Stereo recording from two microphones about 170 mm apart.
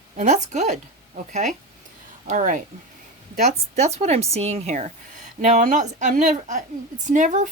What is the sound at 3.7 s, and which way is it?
Speech, 40° right (ahead or behind).